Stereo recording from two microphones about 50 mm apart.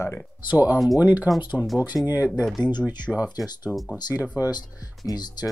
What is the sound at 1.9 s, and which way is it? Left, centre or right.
Speech, centre.